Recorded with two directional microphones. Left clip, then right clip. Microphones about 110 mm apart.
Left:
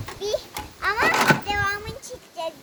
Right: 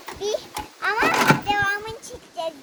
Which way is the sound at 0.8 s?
25° left (ahead or behind).